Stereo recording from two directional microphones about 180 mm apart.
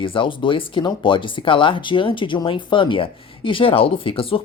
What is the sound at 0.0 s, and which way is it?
Speech, 30° left (ahead or behind).